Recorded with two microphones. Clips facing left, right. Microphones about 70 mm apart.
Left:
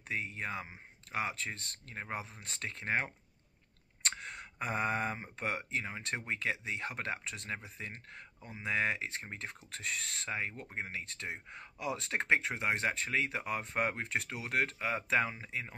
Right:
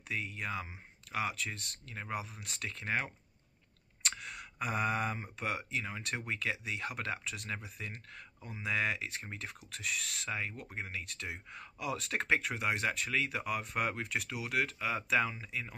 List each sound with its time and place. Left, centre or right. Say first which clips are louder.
0.1 s speech: even; left